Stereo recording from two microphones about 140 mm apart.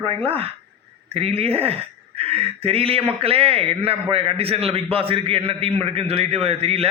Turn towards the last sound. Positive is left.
turn(degrees=-45)  # may be behind; listen again after turning